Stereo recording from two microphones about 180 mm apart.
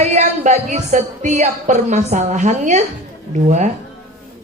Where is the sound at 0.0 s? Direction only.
40° right (ahead or behind).